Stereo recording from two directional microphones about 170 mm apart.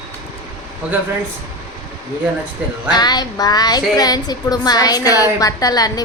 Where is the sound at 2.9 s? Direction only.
25° left (ahead or behind).